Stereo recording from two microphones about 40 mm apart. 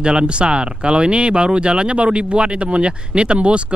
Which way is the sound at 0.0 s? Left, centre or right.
Right.